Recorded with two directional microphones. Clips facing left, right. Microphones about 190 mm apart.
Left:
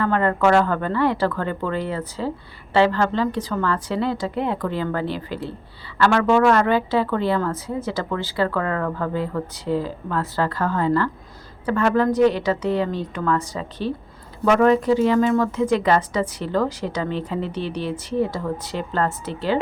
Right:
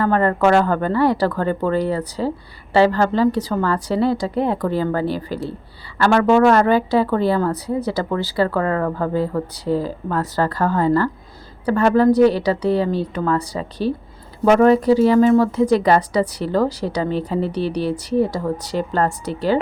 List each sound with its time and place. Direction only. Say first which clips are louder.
0.0 s a woman's voice: right 3 dB; 40° right (ahead or behind)